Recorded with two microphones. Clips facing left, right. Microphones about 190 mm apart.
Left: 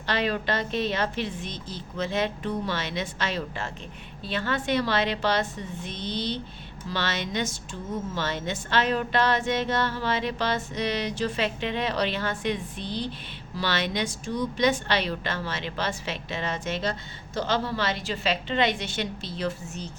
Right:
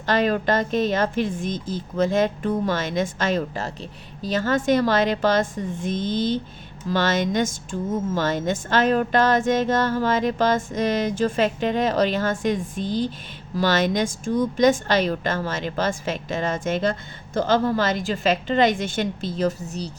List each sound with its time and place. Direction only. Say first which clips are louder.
0.0 s a woman's voice: right 6 dB; 45° right (ahead or behind)